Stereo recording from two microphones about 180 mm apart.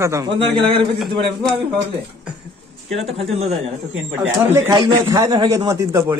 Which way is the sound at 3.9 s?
10° right (ahead or behind).